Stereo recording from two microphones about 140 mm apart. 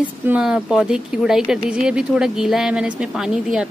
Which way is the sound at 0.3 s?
5° right (ahead or behind).